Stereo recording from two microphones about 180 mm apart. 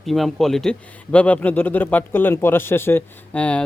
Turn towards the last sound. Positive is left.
turn(degrees=5)  # may be behind; listen again after turning